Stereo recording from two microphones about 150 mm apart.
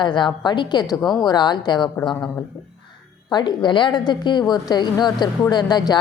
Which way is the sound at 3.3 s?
30° left (ahead or behind).